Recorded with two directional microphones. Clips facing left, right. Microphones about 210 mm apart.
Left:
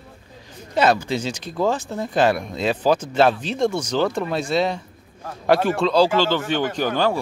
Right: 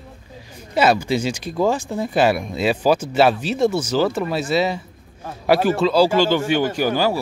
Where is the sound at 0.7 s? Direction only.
10° right (ahead or behind).